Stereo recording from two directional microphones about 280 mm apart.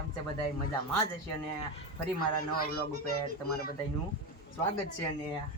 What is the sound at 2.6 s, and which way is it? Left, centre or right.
Speech, left.